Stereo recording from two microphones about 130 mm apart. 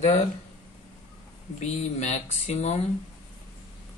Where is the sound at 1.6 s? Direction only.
60° left (ahead or behind).